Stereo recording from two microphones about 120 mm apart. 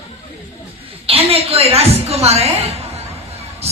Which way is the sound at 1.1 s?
55° right (ahead or behind).